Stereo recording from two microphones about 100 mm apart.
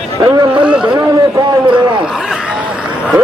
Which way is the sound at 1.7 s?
55° right (ahead or behind).